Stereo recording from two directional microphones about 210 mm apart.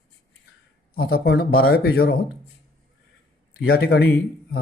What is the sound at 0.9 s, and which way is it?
Speech, 45° left (ahead or behind).